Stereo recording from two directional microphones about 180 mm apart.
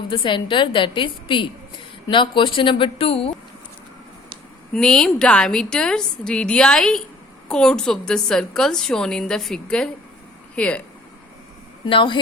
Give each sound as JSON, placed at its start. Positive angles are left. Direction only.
{"t": 0.1, "sound": "a woman's voice", "side_deg": 30}
{"t": 4.7, "sound": "a woman's voice", "side_deg": 5}
{"t": 11.9, "sound": "a woman's voice", "side_deg": 25}